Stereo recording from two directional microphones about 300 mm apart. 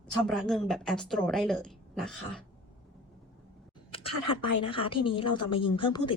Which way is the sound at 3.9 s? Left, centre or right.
Centre.